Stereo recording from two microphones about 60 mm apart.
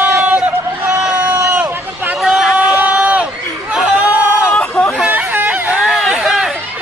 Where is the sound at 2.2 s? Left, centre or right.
Centre.